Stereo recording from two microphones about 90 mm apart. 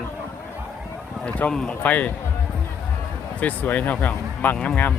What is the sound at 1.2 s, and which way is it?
Speech, 10° left (ahead or behind).